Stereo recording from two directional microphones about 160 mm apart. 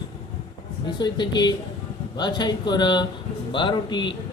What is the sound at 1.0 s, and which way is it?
A man's voice, 30° left (ahead or behind).